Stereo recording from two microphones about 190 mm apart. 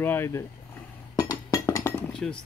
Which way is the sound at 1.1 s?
20° left (ahead or behind).